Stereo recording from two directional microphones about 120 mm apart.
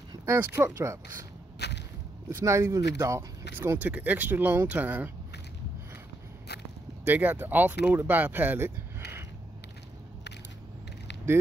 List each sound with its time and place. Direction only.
0.2 s speech: 20° right (ahead or behind)
2.2 s speech: 25° right (ahead or behind)
7.1 s speech: 15° right (ahead or behind)